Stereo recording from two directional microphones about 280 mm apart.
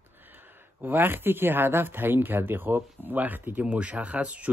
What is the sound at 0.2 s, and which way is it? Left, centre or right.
Speech, centre.